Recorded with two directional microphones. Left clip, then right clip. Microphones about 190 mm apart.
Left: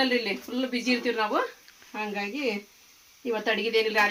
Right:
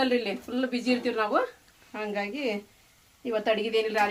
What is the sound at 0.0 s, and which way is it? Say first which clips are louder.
Speech: left 1 dB; 25° right (ahead or behind).